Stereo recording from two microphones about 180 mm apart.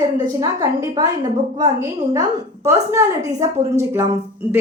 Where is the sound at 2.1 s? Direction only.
15° right (ahead or behind).